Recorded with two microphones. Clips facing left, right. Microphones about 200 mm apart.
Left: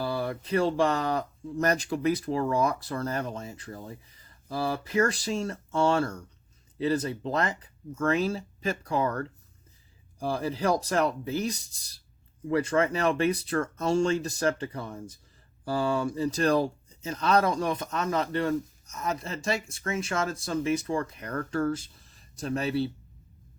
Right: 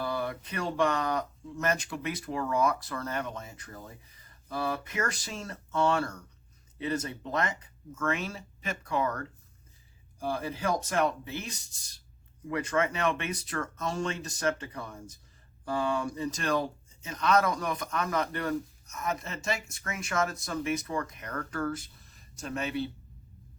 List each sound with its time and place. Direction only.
0.0 s speech: 30° left (ahead or behind)